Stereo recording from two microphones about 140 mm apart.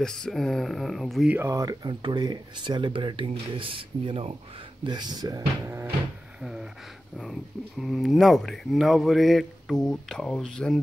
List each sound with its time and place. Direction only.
0.0 s speech: 5° left (ahead or behind)
1.3 s speech: 20° right (ahead or behind)
6.4 s a sound: 5° right (ahead or behind)
7.8 s speech: centre (ahead or behind)